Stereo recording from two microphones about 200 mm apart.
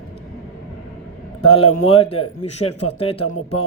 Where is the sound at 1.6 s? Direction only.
90° left.